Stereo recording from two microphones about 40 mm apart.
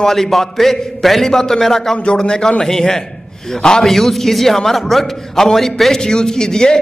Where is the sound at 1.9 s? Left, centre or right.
Left; by 6.0 s centre.